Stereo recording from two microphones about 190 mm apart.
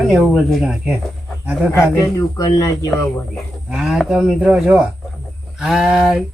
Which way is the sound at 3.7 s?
Centre (ahead or behind).